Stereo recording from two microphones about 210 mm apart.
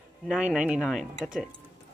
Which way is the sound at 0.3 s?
5° right (ahead or behind).